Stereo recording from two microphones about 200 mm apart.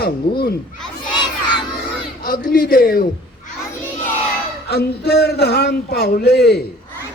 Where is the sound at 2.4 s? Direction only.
45° left (ahead or behind).